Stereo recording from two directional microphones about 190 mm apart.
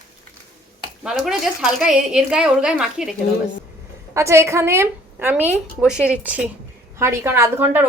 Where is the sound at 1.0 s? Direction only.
Centre (ahead or behind).